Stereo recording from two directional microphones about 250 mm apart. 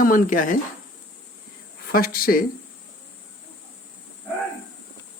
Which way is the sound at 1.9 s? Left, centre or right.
Left.